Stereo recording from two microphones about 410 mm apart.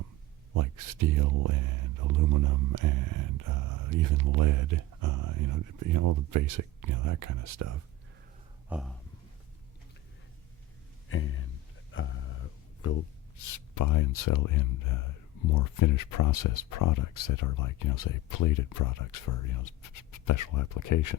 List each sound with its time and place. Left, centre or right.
0.5 s speech: right
8.7 s a sound: centre
11.1 s speech: left